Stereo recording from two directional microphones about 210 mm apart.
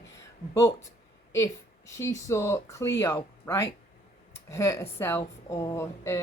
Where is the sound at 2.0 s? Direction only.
15° left (ahead or behind).